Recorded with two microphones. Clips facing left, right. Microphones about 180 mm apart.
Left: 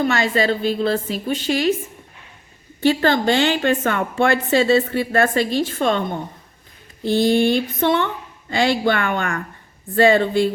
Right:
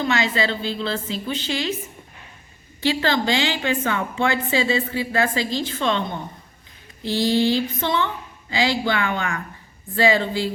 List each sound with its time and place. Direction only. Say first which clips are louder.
0.0 s speech: left 3 dB; 50° left (ahead or behind)
2.8 s a woman's voice: left 5 dB; 50° left (ahead or behind)